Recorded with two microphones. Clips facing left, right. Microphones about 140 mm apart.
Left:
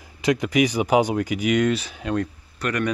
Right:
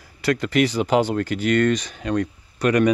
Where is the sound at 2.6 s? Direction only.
15° right (ahead or behind).